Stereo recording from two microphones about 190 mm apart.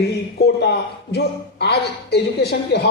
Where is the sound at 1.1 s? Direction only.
60° left (ahead or behind).